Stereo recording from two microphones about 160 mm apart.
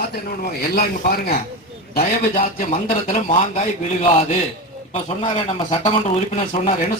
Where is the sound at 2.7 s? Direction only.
40° left (ahead or behind).